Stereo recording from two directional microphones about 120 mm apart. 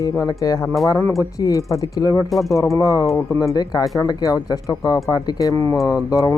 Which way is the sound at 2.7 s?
30° left (ahead or behind).